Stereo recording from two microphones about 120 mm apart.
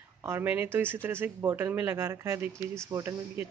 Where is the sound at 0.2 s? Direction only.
20° right (ahead or behind).